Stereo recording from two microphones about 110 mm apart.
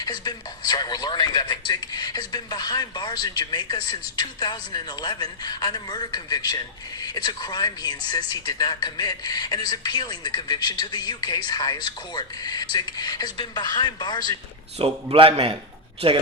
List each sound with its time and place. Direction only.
0.0 s speech: 40° left (ahead or behind)
14.8 s a man's voice: 60° right (ahead or behind)